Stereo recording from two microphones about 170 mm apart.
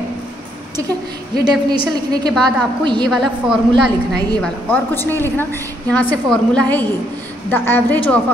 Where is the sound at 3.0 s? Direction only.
Centre (ahead or behind).